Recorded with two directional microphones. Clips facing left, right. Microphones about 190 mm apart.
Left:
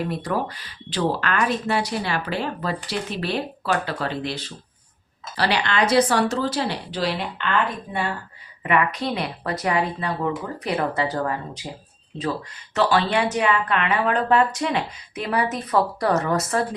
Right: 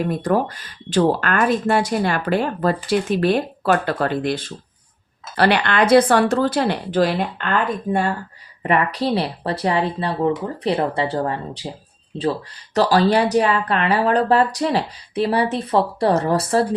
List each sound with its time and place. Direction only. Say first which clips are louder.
0.0 s speech: right 6 dB; 45° right (ahead or behind)
8.6 s speech: right 3 dB; 35° right (ahead or behind)
12.7 s speech: right 4 dB; 40° right (ahead or behind)